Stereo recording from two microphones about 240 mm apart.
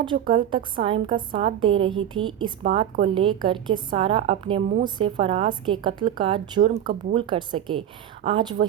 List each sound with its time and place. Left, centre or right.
0.0 s a woman's voice: centre